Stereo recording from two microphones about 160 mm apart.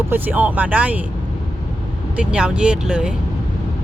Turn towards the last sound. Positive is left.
turn(degrees=-5)  # may be behind; listen again after turning